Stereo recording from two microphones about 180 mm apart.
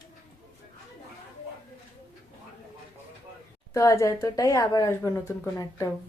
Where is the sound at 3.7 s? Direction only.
15° left (ahead or behind).